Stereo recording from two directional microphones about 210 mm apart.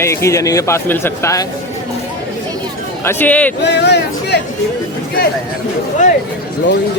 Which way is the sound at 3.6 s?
55° left (ahead or behind).